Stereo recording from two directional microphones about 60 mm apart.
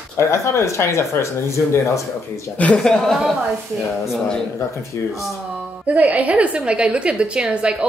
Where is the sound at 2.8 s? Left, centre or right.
Centre.